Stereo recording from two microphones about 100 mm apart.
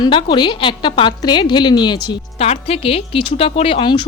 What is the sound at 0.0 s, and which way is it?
A woman's voice, 50° left (ahead or behind).